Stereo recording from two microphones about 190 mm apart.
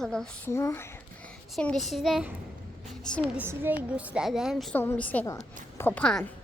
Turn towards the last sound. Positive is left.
turn(degrees=5)  # may be behind; listen again after turning